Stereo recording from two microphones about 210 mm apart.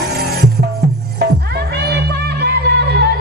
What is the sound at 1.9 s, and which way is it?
Music, 50° right (ahead or behind).